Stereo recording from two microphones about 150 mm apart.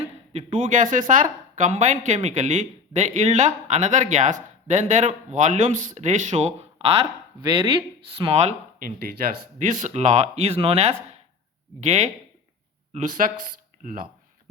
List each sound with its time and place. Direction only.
0.3 s speech: 60° right (ahead or behind); by 7.1 s 40° right (ahead or behind)
7.4 s speech: 30° right (ahead or behind)
8.8 s speech: 80° right